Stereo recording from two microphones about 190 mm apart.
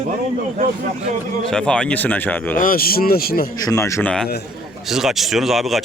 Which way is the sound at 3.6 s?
15° left (ahead or behind).